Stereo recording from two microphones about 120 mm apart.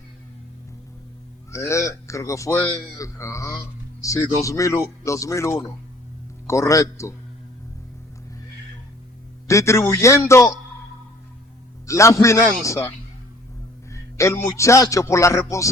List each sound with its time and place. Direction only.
1.5 s a man's voice: 25° left (ahead or behind)
9.5 s a man's voice: 25° left (ahead or behind)
11.9 s a man's voice: 25° left (ahead or behind)
13.9 s a man's voice: 25° left (ahead or behind)